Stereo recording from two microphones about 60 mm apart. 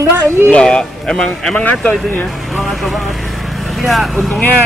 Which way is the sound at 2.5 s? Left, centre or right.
Centre.